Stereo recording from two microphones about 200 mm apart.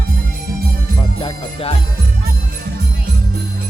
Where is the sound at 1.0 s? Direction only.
25° left (ahead or behind).